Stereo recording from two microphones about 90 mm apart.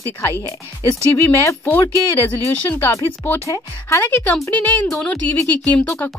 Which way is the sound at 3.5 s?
35° left (ahead or behind).